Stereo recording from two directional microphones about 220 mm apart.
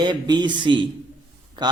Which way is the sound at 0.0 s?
20° right (ahead or behind).